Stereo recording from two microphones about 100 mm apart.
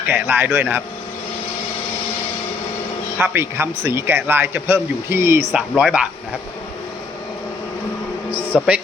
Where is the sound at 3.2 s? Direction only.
25° right (ahead or behind).